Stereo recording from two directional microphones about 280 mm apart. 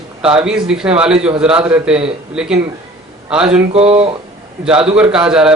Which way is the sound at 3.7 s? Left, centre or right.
Right.